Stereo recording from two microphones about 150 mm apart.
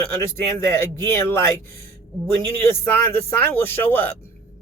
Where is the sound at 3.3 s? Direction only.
15° left (ahead or behind).